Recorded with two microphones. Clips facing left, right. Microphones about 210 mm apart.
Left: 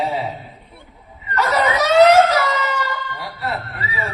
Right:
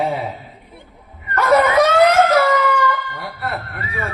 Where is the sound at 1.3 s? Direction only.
55° right (ahead or behind).